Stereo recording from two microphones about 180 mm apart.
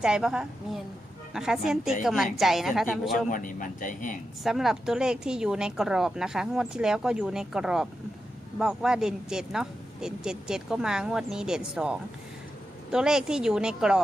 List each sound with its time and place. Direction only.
0.0 s speech: 5° right (ahead or behind)
3.2 s speech: 45° left (ahead or behind)
4.4 s speech: centre (ahead or behind)